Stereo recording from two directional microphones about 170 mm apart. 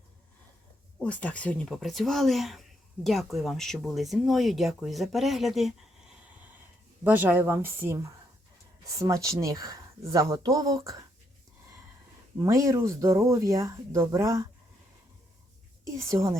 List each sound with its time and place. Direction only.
1.0 s speech: 10° left (ahead or behind)
7.0 s speech: 10° right (ahead or behind)
12.4 s speech: 20° right (ahead or behind)
15.8 s speech: 15° right (ahead or behind)